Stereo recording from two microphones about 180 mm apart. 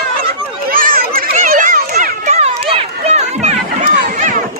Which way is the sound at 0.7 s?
50° right (ahead or behind).